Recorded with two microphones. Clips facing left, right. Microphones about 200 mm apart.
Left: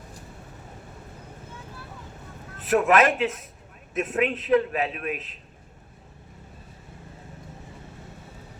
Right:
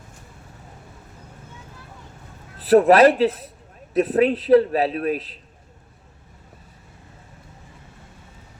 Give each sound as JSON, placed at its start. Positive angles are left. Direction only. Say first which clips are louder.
{"t": 2.6, "sound": "a man's voice", "louder": "right 7 dB", "side_deg": -35}